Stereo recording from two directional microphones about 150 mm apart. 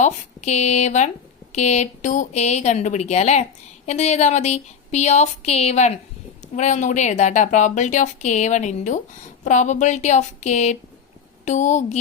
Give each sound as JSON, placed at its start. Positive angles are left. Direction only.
{"t": 0.0, "sound": "a woman's voice", "side_deg": 50}